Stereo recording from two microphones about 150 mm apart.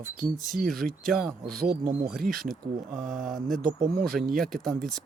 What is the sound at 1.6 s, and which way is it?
Speech, 85° right.